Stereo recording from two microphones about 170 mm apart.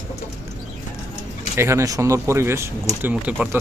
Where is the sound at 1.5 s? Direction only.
15° right (ahead or behind).